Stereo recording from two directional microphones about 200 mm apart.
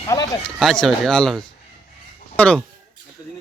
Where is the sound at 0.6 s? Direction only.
Centre (ahead or behind).